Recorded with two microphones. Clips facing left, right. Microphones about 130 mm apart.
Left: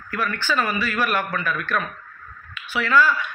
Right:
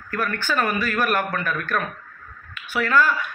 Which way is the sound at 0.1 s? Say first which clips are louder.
Even; 50° right (ahead or behind).